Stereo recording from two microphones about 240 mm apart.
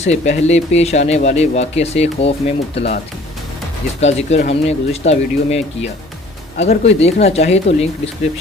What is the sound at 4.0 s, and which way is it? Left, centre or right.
Speech, left.